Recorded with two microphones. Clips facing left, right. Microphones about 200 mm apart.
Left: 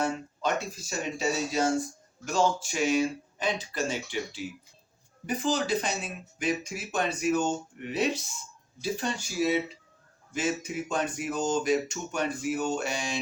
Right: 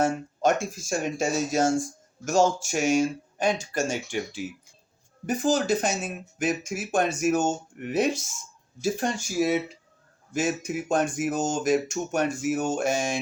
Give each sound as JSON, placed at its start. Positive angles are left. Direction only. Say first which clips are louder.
{"t": 0.0, "sound": "speech", "louder": "right 6 dB", "side_deg": -45}